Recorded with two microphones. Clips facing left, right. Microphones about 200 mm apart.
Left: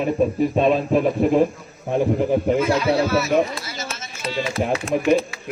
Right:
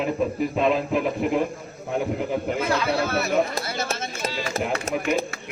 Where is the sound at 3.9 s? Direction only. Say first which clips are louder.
Right 6 dB; 60° right (ahead or behind).